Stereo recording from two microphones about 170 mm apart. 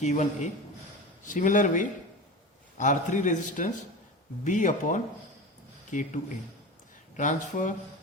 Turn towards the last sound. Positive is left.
turn(degrees=45)  # may be behind; listen again after turning